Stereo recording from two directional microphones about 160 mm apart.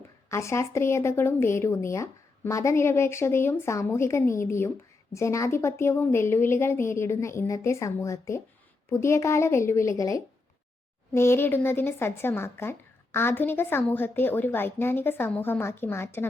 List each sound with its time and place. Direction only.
0.3 s speech: 15° left (ahead or behind)